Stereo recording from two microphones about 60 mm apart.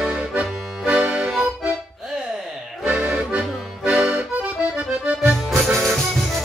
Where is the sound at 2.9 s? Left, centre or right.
Centre.